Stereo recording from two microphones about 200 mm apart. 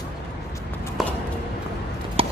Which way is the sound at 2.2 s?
30° right (ahead or behind).